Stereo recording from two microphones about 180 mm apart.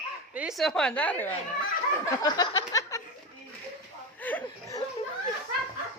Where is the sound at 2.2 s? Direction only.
20° left (ahead or behind).